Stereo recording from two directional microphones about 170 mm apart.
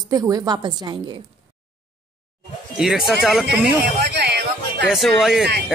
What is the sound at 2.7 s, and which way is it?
Speech, centre (ahead or behind).